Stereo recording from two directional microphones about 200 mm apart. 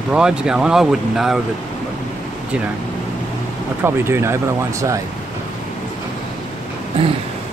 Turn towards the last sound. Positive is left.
turn(degrees=-25)  # may be behind; listen again after turning